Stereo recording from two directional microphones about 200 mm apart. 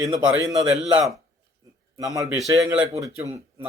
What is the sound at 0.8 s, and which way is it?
Speech, 5° right (ahead or behind).